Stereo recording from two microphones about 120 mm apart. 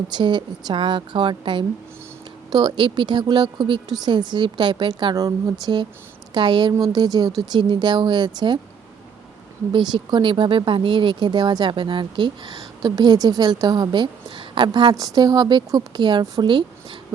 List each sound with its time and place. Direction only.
0.1 s speech: 40° right (ahead or behind)
5.1 s speech: 30° right (ahead or behind)
9.7 s speech: 40° right (ahead or behind)